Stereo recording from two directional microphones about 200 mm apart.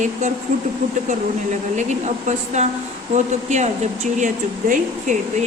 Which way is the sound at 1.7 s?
35° right (ahead or behind).